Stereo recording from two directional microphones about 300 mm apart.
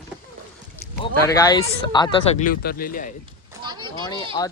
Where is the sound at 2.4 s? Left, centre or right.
Left.